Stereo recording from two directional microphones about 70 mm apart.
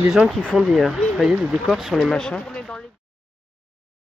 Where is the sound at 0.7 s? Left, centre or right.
Centre.